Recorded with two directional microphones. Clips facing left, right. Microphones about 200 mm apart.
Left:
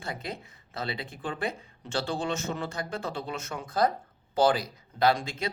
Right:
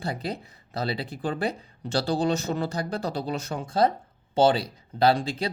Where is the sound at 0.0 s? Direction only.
35° right (ahead or behind).